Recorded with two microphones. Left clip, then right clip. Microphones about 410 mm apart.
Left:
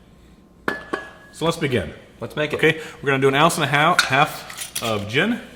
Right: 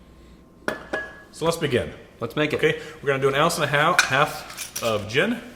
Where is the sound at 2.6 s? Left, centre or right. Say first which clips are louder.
Left 3 dB; left.